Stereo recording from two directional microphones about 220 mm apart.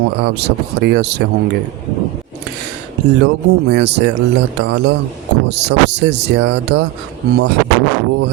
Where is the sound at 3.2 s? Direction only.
50° right (ahead or behind).